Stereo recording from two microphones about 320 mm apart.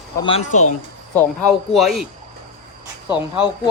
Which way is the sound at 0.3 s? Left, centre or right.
Centre.